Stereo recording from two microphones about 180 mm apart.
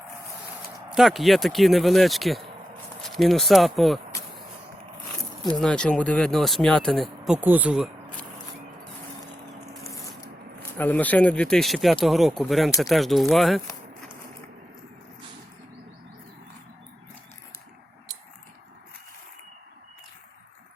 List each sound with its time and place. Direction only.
0.9 s speech: centre (ahead or behind)
5.5 s speech: 5° left (ahead or behind)
10.8 s speech: 10° left (ahead or behind)